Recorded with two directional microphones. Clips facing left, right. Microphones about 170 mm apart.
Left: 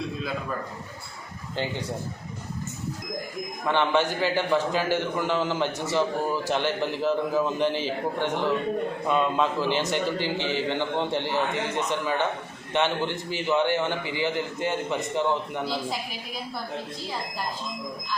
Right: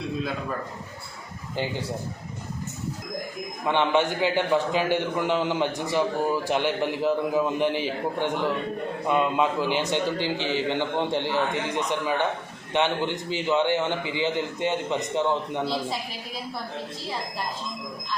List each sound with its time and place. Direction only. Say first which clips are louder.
3.6 s a man's voice: right 1 dB; 15° right (ahead or behind)
15.6 s a woman's voice: right 2 dB; centre (ahead or behind)